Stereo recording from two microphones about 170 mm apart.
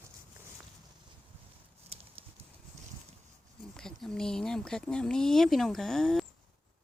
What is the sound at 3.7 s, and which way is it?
Speech, 5° left (ahead or behind).